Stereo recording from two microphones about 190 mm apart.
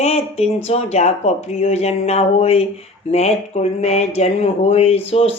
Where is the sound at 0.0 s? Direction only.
35° left (ahead or behind).